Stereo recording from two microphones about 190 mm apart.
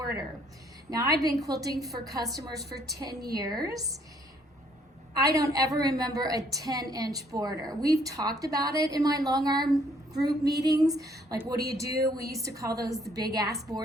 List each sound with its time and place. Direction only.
0.9 s a woman's voice: 20° right (ahead or behind)
5.1 s a woman's voice: 20° right (ahead or behind)